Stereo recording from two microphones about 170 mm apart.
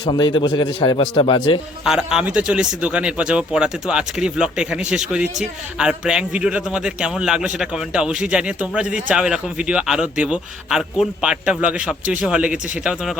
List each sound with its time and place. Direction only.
0.0 s a man's voice: 30° left (ahead or behind)
1.8 s a man's voice: 5° right (ahead or behind)